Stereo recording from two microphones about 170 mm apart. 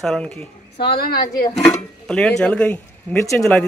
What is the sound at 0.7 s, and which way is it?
Speech, 65° left (ahead or behind).